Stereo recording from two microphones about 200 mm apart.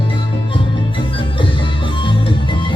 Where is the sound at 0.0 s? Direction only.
25° left (ahead or behind).